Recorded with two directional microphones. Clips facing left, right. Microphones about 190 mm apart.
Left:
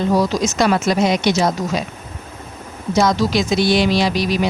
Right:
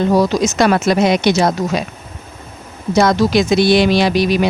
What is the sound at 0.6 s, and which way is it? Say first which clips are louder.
Speech: right 3 dB; 65° right (ahead or behind).